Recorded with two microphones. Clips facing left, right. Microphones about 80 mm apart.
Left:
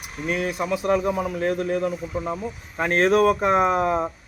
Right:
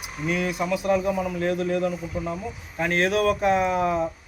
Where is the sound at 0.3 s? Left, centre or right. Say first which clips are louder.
Left 1 dB; left.